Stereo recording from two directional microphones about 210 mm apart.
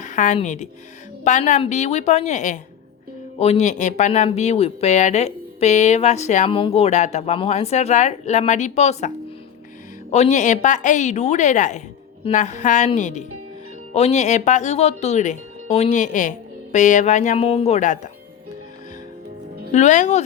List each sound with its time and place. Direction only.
0.0 s speech: 35° left (ahead or behind)
19.7 s speech: 35° left (ahead or behind)